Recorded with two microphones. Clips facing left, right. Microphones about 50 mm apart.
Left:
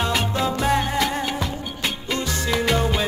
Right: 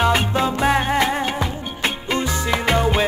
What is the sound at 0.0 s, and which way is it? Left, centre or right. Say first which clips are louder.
Music: right 4 dB; right.